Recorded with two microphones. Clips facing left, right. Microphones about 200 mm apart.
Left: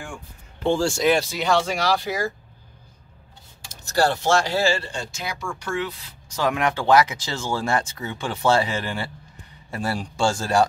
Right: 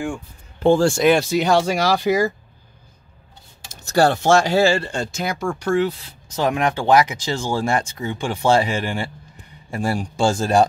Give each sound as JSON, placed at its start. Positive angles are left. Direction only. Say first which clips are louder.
{"t": 0.6, "sound": "speech", "louder": "right 6 dB", "side_deg": -50}
{"t": 3.9, "sound": "speech", "louder": "right 5 dB", "side_deg": -55}
{"t": 6.2, "sound": "speech", "louder": "right 3 dB", "side_deg": -20}